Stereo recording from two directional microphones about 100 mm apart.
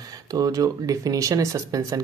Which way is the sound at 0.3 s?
40° right (ahead or behind).